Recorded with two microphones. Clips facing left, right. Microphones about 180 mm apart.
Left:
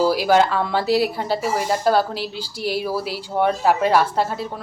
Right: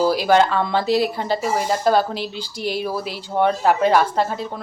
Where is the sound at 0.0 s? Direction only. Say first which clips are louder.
Even; 10° left (ahead or behind).